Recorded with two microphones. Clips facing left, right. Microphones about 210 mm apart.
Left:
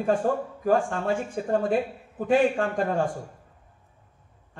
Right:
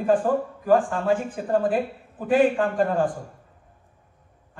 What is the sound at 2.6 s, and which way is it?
Speech, 45° left (ahead or behind).